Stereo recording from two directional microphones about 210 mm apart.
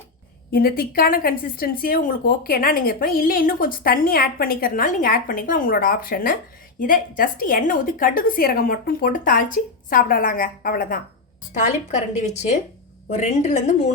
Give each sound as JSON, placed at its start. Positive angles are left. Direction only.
{"t": 0.5, "sound": "a woman's voice", "side_deg": 45}